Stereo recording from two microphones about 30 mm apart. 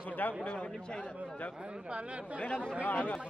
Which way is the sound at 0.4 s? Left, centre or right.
Left.